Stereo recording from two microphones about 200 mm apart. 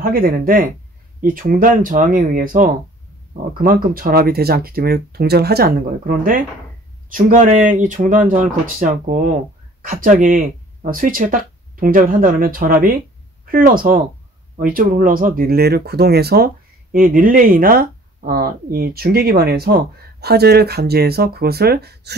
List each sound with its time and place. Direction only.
0.0 s speech: 50° right (ahead or behind)